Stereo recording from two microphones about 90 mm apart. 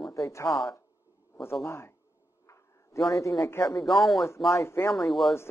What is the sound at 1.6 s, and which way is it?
Speech, 30° left (ahead or behind).